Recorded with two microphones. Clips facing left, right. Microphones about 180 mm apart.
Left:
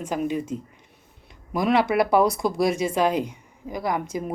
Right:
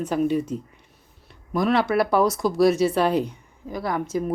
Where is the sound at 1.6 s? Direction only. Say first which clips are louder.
Left 1 dB; 15° left (ahead or behind).